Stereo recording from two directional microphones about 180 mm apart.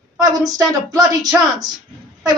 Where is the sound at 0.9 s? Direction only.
20° right (ahead or behind).